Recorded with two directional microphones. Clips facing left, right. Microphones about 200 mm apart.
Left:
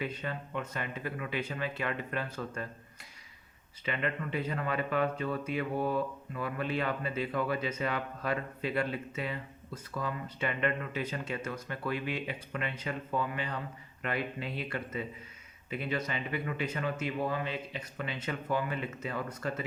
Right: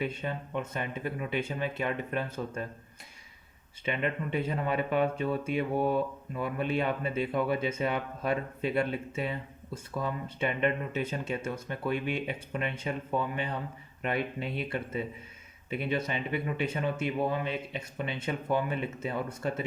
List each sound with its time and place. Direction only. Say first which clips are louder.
0.0 s speech: right 3 dB; 25° right (ahead or behind)
3.8 s speech: right 3 dB; 25° right (ahead or behind)
15.9 s speech: right 3 dB; 25° right (ahead or behind)